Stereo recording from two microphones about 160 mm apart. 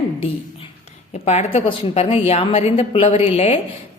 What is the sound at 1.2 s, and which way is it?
A woman's voice, 45° left (ahead or behind).